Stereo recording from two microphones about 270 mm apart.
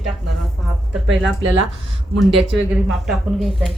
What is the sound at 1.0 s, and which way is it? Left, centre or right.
Speech, right.